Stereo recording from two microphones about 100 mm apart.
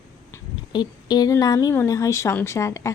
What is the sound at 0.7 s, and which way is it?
A woman's voice, 45° left (ahead or behind).